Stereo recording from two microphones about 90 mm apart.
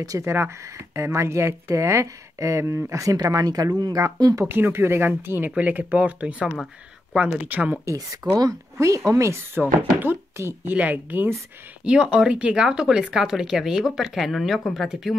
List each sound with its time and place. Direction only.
0.0 s speech: 35° right (ahead or behind)
4.5 s speech: 25° right (ahead or behind)
7.8 s speech: 35° right (ahead or behind)
9.6 s speech: 20° right (ahead or behind)
11.8 s speech: 10° right (ahead or behind)